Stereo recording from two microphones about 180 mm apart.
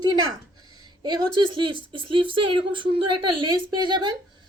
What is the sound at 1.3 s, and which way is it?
Speech, 25° right (ahead or behind).